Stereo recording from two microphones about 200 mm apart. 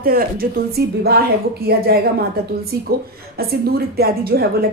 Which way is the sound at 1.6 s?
50° right (ahead or behind).